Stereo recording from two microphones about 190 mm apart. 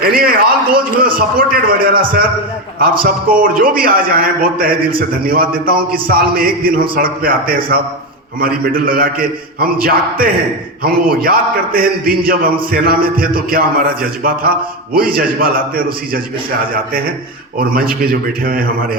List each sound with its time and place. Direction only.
0.0 s a man's voice: 50° right (ahead or behind)
3.0 s a man's voice: 50° right (ahead or behind)
17.6 s a man's voice: 50° right (ahead or behind)